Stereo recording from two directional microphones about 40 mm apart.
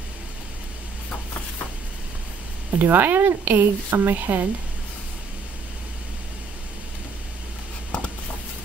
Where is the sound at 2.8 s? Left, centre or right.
Right.